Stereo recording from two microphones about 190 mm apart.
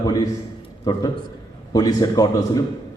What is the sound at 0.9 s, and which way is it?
A man's voice, 20° left (ahead or behind).